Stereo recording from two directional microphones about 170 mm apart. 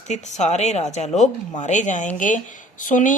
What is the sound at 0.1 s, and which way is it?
Speech, 45° left (ahead or behind).